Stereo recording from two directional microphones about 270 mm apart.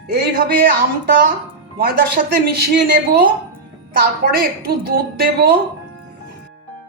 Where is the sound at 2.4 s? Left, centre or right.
Right.